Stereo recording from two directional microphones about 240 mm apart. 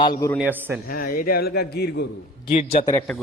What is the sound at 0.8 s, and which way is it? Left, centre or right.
A man's voice, left.